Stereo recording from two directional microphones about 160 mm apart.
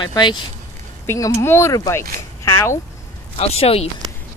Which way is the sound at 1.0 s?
15° left (ahead or behind).